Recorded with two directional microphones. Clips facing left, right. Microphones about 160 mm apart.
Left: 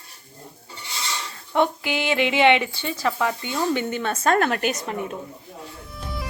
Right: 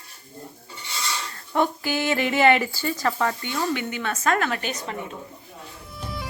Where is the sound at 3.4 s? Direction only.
20° left (ahead or behind).